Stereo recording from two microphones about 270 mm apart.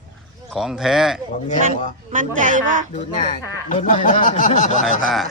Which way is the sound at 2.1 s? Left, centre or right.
Right.